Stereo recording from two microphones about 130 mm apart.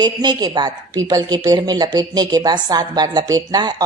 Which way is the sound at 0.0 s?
35° right (ahead or behind).